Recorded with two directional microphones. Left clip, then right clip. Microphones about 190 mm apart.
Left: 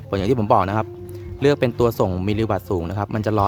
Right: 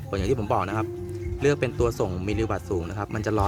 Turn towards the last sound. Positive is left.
turn(degrees=55)  # may be behind; listen again after turning